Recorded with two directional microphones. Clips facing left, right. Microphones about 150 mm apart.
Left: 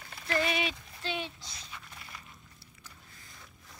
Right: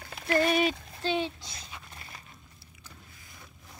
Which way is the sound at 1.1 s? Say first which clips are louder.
Right 8 dB; 25° right (ahead or behind).